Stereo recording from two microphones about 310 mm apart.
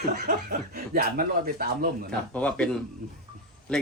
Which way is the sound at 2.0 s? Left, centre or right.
Centre.